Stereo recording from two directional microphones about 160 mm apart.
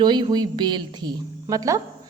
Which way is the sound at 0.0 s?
25° right (ahead or behind).